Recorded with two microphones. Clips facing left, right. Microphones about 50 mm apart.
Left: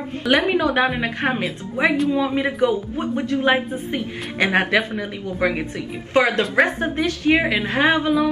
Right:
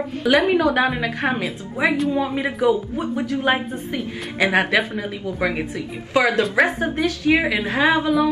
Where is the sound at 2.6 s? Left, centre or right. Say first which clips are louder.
Right 4 dB; left.